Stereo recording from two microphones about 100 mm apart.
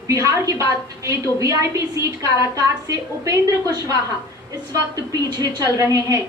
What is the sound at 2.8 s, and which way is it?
A woman's voice, 40° right (ahead or behind).